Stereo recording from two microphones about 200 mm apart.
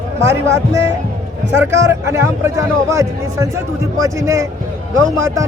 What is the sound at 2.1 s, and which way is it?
Speech, 15° right (ahead or behind).